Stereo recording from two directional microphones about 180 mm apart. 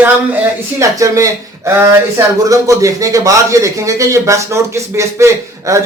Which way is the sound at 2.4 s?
20° right (ahead or behind).